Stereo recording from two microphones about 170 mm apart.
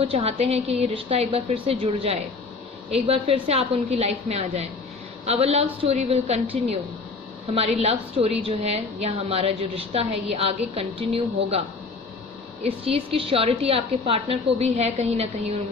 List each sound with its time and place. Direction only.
0.0 s a woman's voice: 35° right (ahead or behind)
7.4 s a woman's voice: 35° right (ahead or behind)
12.6 s a woman's voice: 35° right (ahead or behind)